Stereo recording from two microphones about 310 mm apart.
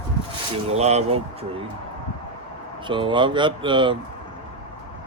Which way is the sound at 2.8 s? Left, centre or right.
Centre.